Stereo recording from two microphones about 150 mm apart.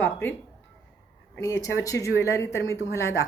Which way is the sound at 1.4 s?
20° left (ahead or behind).